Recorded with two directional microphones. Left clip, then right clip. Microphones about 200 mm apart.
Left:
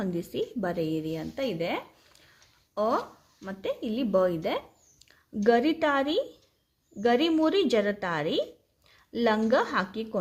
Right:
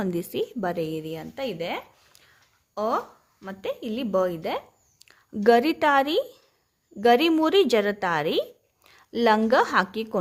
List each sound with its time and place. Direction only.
0.0 s a woman's voice: 30° right (ahead or behind)
5.3 s a woman's voice: 35° right (ahead or behind)